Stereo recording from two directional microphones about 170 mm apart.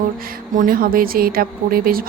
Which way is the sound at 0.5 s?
55° right (ahead or behind).